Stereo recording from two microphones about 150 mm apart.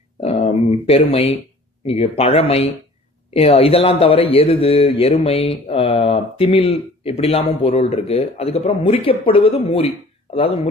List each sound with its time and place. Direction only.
0.2 s a man's voice: 45° left (ahead or behind)